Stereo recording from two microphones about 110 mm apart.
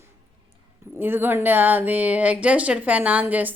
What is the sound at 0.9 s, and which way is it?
A woman's voice, 20° right (ahead or behind).